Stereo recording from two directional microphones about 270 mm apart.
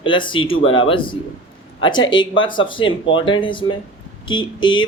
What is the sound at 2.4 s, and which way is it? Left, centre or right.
Speech, centre.